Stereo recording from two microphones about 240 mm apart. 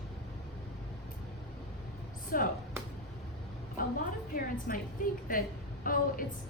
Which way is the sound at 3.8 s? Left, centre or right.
Left.